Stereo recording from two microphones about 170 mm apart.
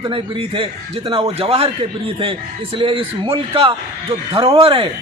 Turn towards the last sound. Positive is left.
turn(degrees=-30)  # may be behind; listen again after turning